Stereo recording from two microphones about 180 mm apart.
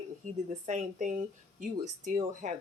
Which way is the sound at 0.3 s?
40° right (ahead or behind).